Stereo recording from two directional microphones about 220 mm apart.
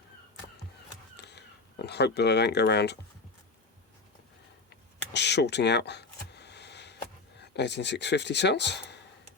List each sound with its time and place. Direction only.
1.1 s speech: 50° left (ahead or behind)
5.1 s a sound: 50° left (ahead or behind)
7.3 s speech: 50° left (ahead or behind)